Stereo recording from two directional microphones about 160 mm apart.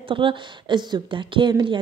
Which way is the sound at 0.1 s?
30° right (ahead or behind).